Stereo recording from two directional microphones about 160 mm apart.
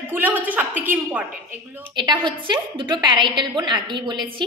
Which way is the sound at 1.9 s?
30° right (ahead or behind).